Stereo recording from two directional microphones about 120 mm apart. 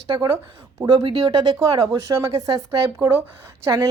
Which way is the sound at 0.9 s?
50° right (ahead or behind).